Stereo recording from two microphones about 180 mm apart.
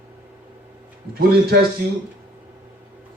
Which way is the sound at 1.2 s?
60° right (ahead or behind).